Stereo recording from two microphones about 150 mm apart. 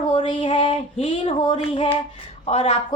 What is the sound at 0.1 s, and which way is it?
A woman's voice, 35° left (ahead or behind).